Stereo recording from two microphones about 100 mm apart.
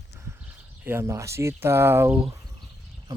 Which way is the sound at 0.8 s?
25° right (ahead or behind).